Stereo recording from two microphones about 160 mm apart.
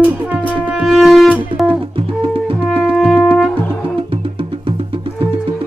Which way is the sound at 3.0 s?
5° left (ahead or behind).